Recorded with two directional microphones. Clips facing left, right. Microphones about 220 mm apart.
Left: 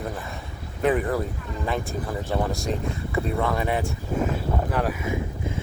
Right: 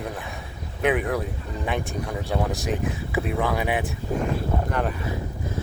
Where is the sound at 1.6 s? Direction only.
Centre (ahead or behind).